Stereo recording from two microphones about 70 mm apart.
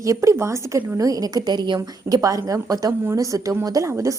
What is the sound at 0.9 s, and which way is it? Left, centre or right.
A woman's voice, right.